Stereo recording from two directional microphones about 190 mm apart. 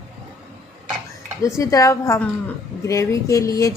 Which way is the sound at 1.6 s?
15° left (ahead or behind).